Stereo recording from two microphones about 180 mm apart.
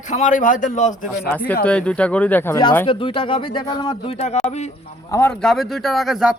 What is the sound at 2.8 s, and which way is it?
Speech, 30° left (ahead or behind).